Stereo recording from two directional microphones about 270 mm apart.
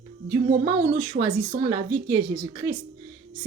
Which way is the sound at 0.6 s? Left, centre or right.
Centre.